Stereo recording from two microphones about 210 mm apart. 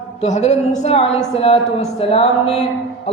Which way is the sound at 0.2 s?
35° left (ahead or behind).